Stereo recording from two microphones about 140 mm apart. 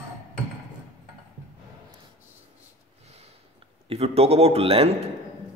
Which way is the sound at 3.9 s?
45° right (ahead or behind).